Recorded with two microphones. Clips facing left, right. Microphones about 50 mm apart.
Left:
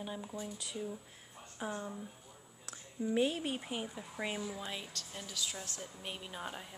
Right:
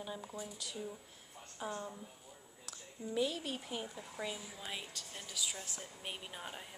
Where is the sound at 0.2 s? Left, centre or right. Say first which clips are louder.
Left 3 dB; centre.